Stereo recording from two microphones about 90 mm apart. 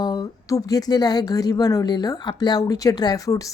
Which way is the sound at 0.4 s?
40° left (ahead or behind).